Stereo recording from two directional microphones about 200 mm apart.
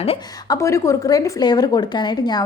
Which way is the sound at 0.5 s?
15° left (ahead or behind).